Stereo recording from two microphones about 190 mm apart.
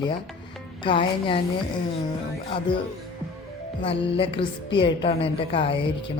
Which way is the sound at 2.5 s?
25° left (ahead or behind).